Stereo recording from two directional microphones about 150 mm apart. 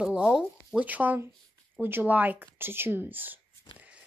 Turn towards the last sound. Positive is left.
turn(degrees=-10)  # may be behind; listen again after turning